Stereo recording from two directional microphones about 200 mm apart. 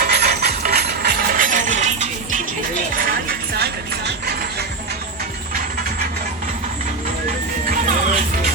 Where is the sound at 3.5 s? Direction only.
55° right (ahead or behind).